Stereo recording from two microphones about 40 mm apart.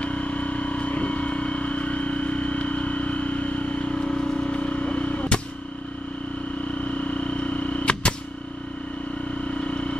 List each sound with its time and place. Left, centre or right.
0.0 s vehicle: left
6.8 s a sound: left
9.5 s vehicle: left